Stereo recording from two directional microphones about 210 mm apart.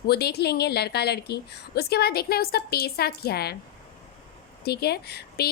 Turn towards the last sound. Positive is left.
turn(degrees=50)  # may be behind; listen again after turning